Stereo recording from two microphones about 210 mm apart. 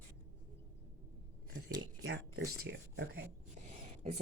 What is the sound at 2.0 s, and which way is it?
Speech, 55° right (ahead or behind).